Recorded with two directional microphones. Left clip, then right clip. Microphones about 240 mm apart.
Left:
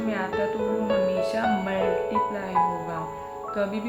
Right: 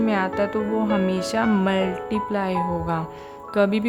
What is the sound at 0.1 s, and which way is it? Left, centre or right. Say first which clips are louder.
Speech: right 4 dB; right.